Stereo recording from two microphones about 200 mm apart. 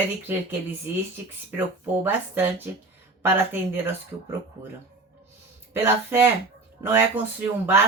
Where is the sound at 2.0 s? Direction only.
10° right (ahead or behind).